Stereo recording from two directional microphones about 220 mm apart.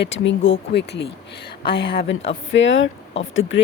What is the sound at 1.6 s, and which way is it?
Speech, 25° left (ahead or behind).